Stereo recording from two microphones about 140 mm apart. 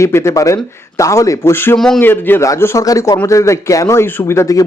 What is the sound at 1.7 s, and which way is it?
Speech, 5° left (ahead or behind).